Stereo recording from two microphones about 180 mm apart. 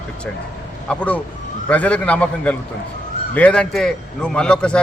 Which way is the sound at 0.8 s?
5° left (ahead or behind).